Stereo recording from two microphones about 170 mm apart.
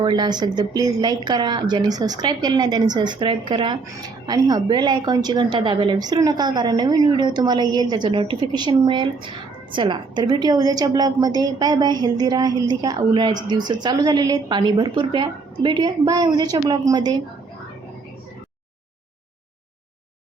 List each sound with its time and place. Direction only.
0.0 s a woman's voice: 25° right (ahead or behind)